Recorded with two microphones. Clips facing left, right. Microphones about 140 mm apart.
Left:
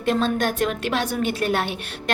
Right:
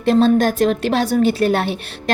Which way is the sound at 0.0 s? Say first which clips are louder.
Right 8 dB; 40° right (ahead or behind).